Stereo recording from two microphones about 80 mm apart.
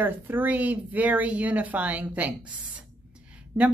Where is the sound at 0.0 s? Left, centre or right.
Right.